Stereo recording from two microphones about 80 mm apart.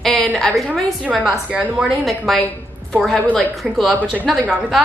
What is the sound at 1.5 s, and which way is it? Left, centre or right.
Speech, centre.